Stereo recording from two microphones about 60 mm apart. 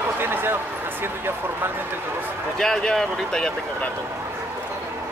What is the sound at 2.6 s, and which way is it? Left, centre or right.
Speech, centre.